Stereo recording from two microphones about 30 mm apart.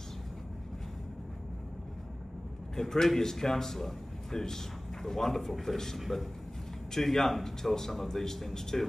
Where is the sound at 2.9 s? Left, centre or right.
Centre.